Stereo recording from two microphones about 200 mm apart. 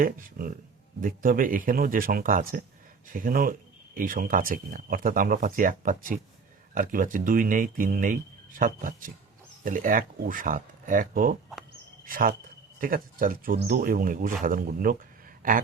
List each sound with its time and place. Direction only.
0.0 s speech: 45° right (ahead or behind)